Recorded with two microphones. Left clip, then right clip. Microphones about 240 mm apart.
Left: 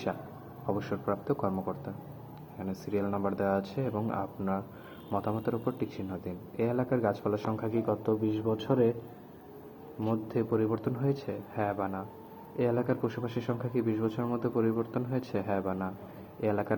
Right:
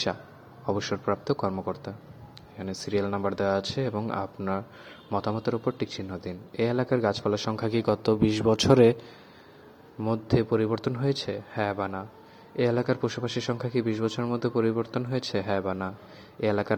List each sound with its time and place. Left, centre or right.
0.6 s a man's voice: right
10.0 s a man's voice: right